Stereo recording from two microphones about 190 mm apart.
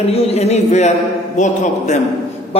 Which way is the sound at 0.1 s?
35° left (ahead or behind).